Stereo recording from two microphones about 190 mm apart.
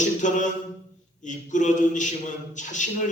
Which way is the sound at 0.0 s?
40° left (ahead or behind).